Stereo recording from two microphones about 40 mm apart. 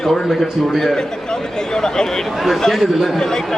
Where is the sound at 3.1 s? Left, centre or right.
Centre.